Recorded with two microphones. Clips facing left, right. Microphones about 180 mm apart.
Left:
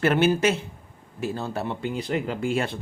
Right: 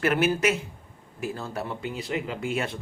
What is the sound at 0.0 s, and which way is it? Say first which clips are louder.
Speech: left 3 dB; 30° left (ahead or behind).